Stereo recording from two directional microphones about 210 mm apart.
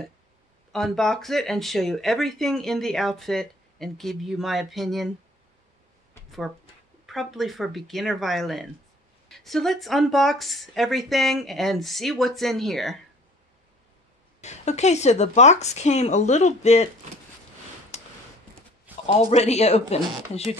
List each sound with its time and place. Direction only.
0.7 s speech: centre (ahead or behind)
7.1 s speech: centre (ahead or behind)
14.4 s speech: 35° left (ahead or behind)
19.0 s speech: 30° left (ahead or behind)